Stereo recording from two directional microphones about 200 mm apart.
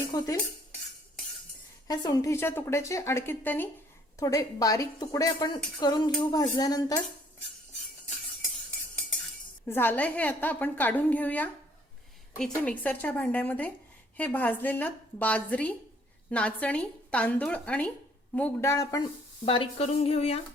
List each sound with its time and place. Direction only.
0.1 s cutlery: 20° left (ahead or behind)
1.9 s speech: 20° left (ahead or behind)
9.6 s speech: 10° left (ahead or behind)
19.5 s speech: 30° left (ahead or behind)